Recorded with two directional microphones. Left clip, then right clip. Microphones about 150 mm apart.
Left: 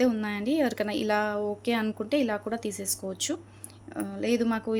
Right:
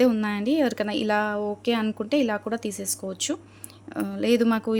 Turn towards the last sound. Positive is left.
turn(degrees=-40)  # may be behind; listen again after turning